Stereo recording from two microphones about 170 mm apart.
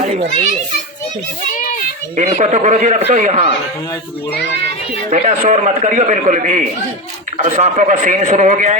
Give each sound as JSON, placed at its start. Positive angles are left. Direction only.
{"t": 2.1, "sound": "a man's voice", "side_deg": -45}
{"t": 5.1, "sound": "a man's voice", "side_deg": -40}
{"t": 7.3, "sound": "a man's voice", "side_deg": -35}